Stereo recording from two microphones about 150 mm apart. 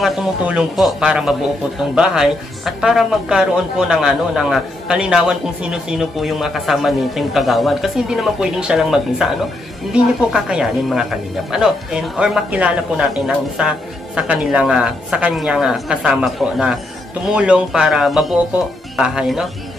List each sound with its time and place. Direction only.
0.0 s speech: centre (ahead or behind)
10.3 s speech: 5° right (ahead or behind)